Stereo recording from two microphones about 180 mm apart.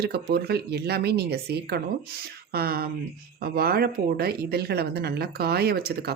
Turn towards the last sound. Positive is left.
turn(degrees=-60)  # may be behind; listen again after turning